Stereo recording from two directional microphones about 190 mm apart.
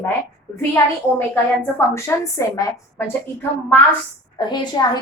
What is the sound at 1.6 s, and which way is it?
Speech, 15° left (ahead or behind).